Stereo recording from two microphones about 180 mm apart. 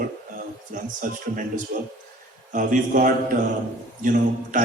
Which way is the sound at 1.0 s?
45° right (ahead or behind).